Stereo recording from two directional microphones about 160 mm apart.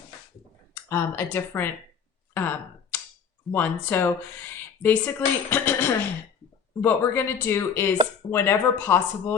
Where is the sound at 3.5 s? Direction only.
15° left (ahead or behind).